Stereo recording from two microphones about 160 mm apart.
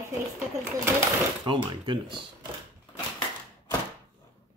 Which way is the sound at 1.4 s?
30° right (ahead or behind).